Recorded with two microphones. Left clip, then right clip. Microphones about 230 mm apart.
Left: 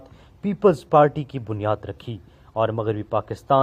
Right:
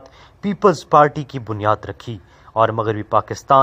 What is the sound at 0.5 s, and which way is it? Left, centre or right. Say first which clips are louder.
Speech: right 3 dB; right.